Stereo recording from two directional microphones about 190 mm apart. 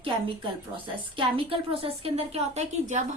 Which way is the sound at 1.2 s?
30° right (ahead or behind).